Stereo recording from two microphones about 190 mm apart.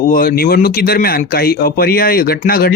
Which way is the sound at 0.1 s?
50° left (ahead or behind).